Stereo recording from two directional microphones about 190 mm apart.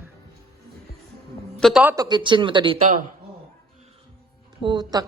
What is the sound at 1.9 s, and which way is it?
Speech, 20° right (ahead or behind).